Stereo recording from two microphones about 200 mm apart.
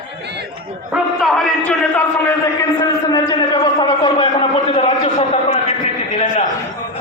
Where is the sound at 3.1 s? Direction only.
20° left (ahead or behind); by 6.4 s 40° left (ahead or behind).